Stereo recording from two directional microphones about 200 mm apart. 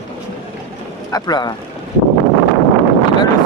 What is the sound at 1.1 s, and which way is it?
Speech, 20° left (ahead or behind).